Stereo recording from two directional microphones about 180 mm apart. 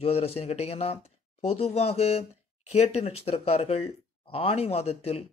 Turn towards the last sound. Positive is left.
turn(degrees=35)  # may be behind; listen again after turning